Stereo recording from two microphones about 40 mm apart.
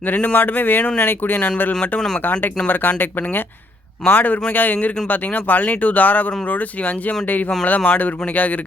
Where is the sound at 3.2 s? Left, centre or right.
Left.